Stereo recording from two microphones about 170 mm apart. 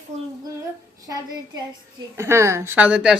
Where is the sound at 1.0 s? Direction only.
20° right (ahead or behind).